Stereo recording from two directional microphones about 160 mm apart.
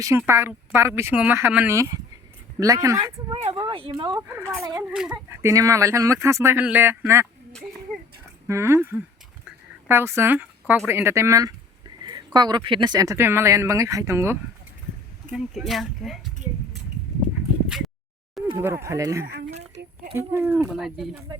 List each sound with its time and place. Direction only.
0.0 s speech: 15° right (ahead or behind)
3.3 s speech: 35° right (ahead or behind)
5.1 s speech: 20° right (ahead or behind)
8.4 s speech: 15° right (ahead or behind)
15.3 s speech: centre (ahead or behind)
17.7 s a sound: centre (ahead or behind)
18.5 s speech: 15° right (ahead or behind)
19.2 s speech: 80° right
20.1 s speech: 15° right (ahead or behind)
20.7 s speech: centre (ahead or behind)